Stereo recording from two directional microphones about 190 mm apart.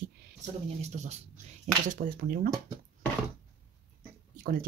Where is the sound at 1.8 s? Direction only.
50° right (ahead or behind).